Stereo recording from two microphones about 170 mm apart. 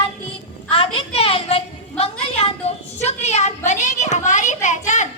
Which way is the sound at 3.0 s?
40° left (ahead or behind).